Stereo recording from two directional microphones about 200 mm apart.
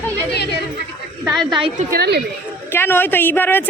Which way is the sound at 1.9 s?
55° right (ahead or behind).